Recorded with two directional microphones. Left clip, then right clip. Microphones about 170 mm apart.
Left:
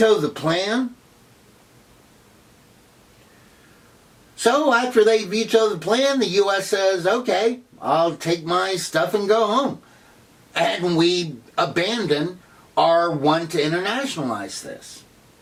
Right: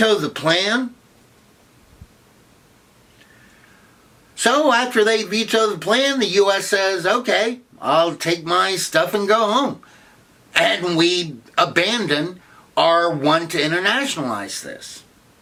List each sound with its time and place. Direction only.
0.0 s speech: 30° right (ahead or behind)
4.4 s speech: 25° right (ahead or behind)